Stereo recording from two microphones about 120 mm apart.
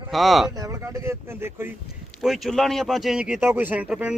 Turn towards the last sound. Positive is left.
turn(degrees=-10)  # may be behind; listen again after turning